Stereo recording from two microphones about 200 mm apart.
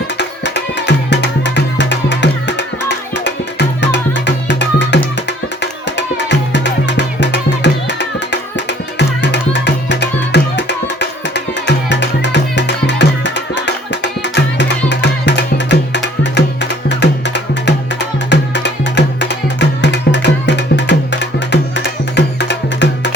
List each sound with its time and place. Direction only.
0.2 s music: 60° left (ahead or behind)
6.0 s music: 60° left (ahead or behind)
14.8 s music: 60° left (ahead or behind)